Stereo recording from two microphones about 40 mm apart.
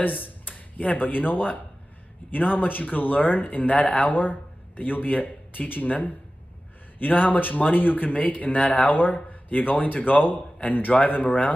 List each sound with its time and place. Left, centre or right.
0.0 s speech: left